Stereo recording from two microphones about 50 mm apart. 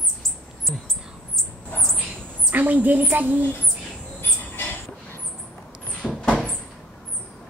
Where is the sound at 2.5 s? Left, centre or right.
Right.